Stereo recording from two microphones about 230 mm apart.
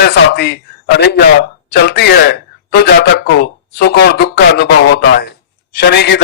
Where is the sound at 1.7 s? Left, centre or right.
Left.